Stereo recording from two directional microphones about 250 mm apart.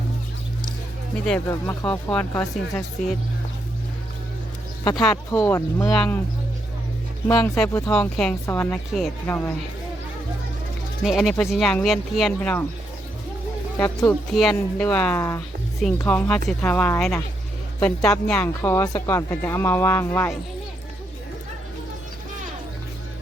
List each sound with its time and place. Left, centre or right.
1.2 s speech: centre
1.6 s speech: centre
4.8 s speech: centre
7.3 s speech: centre
11.0 s speech: centre
14.0 s speech: centre